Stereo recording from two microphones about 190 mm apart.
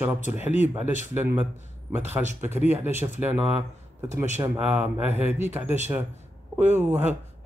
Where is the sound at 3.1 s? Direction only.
35° right (ahead or behind).